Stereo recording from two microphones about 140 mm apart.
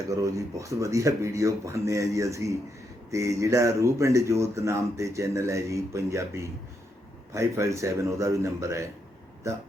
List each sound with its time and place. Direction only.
0.1 s speech: 25° right (ahead or behind)